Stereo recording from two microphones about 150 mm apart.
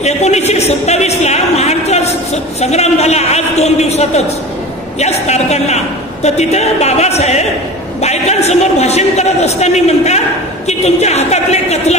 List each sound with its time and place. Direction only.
0.0 s a man's voice: 45° left (ahead or behind)